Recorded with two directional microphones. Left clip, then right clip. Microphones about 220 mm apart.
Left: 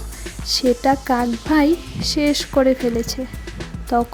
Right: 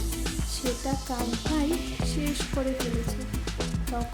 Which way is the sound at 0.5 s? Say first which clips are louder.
Left 16 dB; 40° left (ahead or behind).